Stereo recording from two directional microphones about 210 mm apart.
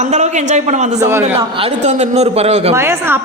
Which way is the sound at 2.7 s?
10° right (ahead or behind).